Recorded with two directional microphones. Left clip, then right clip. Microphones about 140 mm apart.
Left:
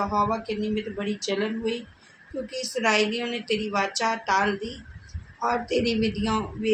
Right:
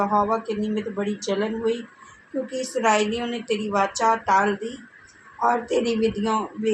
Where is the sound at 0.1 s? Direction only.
45° right (ahead or behind).